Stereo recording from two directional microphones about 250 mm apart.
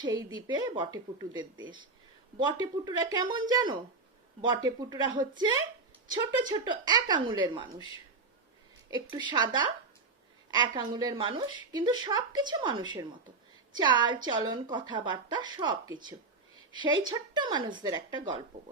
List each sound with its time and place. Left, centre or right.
0.0 s speech: centre
9.0 s speech: centre
17.1 s speech: centre